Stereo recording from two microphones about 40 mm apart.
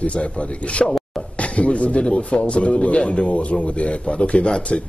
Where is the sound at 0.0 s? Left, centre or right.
Left.